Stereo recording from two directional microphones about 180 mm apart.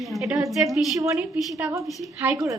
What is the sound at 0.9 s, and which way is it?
Speech, 20° right (ahead or behind).